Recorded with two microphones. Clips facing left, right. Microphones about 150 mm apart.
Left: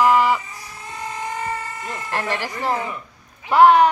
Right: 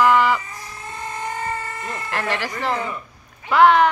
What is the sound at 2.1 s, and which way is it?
Speech, 15° left (ahead or behind).